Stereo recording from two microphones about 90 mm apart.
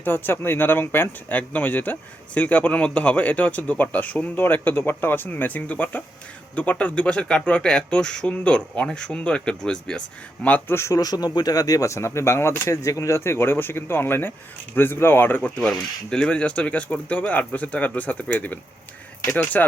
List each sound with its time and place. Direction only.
0.0 s speech: 25° left (ahead or behind)
10.9 s speech: 45° left (ahead or behind); by 12.7 s 30° left (ahead or behind)
12.7 s speech: 40° left (ahead or behind)